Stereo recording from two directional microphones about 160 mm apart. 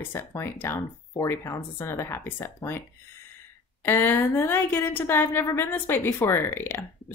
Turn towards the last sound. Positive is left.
turn(degrees=15)  # may be behind; listen again after turning